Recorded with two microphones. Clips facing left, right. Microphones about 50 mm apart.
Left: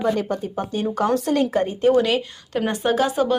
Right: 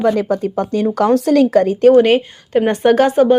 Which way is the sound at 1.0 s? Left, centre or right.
Right.